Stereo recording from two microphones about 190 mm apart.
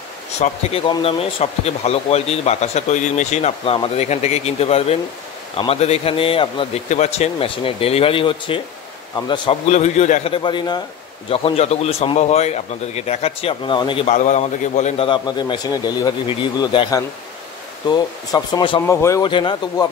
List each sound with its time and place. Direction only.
0.4 s speech: 30° left (ahead or behind)
9.7 s speech: 35° left (ahead or behind)
15.0 s speech: 25° left (ahead or behind)